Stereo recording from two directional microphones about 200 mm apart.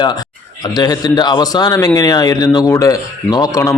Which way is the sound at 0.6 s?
20° left (ahead or behind).